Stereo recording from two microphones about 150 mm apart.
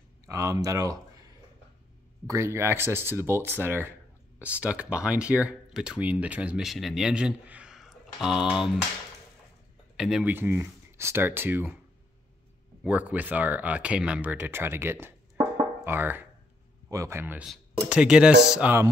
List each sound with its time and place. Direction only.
0.3 s a sound: 20° right (ahead or behind)
2.2 s speech: 20° right (ahead or behind)
9.9 s speech: 5° right (ahead or behind)
12.8 s speech: 10° right (ahead or behind)